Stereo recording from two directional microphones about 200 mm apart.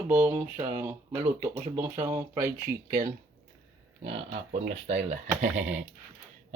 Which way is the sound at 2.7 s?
45° right (ahead or behind).